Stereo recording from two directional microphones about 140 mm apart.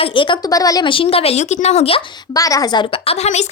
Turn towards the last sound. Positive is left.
turn(degrees=50)  # may be behind; listen again after turning